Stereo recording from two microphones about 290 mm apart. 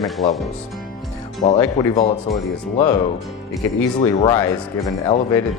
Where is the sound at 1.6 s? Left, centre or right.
Centre.